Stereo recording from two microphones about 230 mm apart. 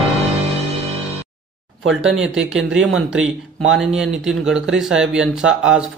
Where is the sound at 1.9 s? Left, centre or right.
Centre.